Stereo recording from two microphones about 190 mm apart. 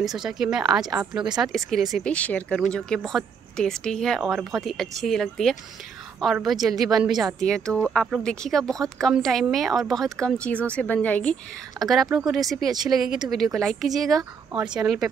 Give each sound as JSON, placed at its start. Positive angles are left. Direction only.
{"t": 0.0, "sound": "speech", "side_deg": 0}
{"t": 14.5, "sound": "speech", "side_deg": -25}
{"t": 14.8, "sound": "speech", "side_deg": 0}